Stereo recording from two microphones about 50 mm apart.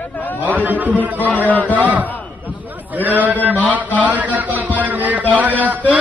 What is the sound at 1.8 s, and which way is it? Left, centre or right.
A man's voice, right.